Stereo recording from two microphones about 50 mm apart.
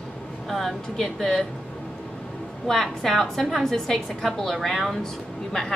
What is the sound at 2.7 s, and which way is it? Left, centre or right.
A woman's voice, centre.